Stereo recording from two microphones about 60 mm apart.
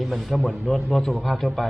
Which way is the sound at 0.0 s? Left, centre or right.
Centre.